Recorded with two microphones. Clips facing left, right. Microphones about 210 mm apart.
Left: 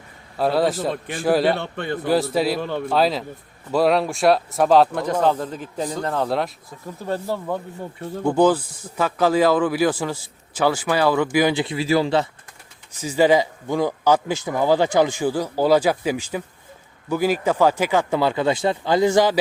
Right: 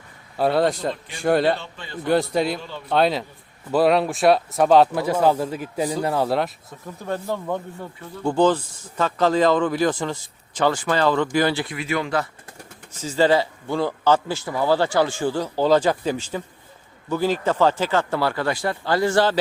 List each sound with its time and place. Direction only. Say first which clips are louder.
0.3 s speech: even; centre (ahead or behind)
1.5 s a man's voice: left 9 dB; 60° left (ahead or behind)
2.0 s speech: even; centre (ahead or behind)
2.6 s a man's voice: left 10 dB; 60° left (ahead or behind)
2.9 s speech: right 2 dB; centre (ahead or behind)
11.6 s speech: left 6 dB; 30° left (ahead or behind)
13.0 s speech: left 2 dB; 15° left (ahead or behind)